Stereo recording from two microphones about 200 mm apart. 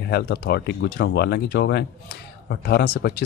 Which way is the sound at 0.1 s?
55° left (ahead or behind).